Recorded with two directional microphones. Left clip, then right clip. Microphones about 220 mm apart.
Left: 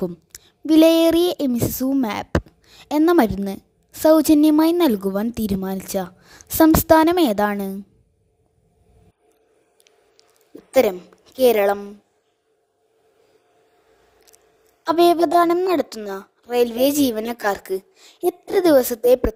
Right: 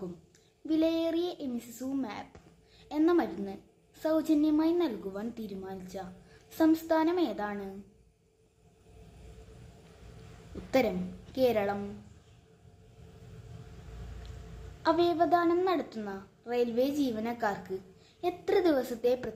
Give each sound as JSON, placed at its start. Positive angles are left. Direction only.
{"t": 0.3, "sound": "a woman's voice", "side_deg": 50}
{"t": 2.6, "sound": "a sound", "side_deg": 50}
{"t": 3.0, "sound": "a woman's voice", "side_deg": 50}
{"t": 10.7, "sound": "a woman's voice", "side_deg": 50}
{"t": 14.9, "sound": "a woman's voice", "side_deg": 50}